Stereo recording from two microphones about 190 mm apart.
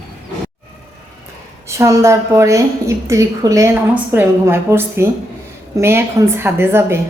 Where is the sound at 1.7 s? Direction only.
15° right (ahead or behind).